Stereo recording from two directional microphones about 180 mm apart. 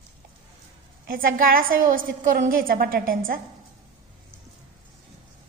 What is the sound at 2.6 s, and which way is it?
Speech, 55° right (ahead or behind).